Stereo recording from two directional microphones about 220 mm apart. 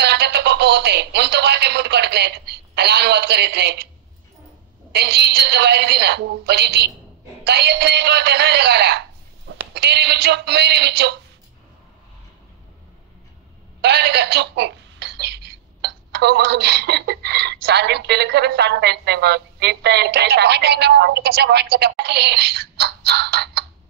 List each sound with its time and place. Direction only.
0.0 s speech: 50° right (ahead or behind)
4.9 s speech: 50° right (ahead or behind)
13.7 s speech: 50° right (ahead or behind)